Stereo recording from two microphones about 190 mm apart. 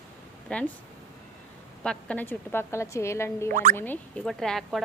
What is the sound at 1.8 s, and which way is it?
Speech, 10° left (ahead or behind).